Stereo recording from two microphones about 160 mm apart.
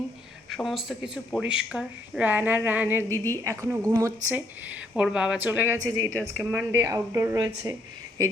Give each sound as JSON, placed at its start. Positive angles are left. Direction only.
{"t": 0.5, "sound": "speech", "side_deg": 0}